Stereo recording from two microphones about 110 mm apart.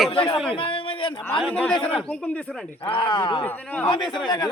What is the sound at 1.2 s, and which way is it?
A man's voice, 10° left (ahead or behind).